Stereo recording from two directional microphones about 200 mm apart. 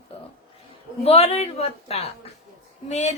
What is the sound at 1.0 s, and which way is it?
A woman's voice, 30° left (ahead or behind).